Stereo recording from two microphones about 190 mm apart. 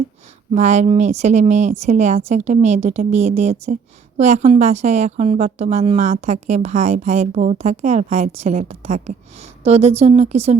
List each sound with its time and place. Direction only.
0.5 s a woman's voice: 40° right (ahead or behind)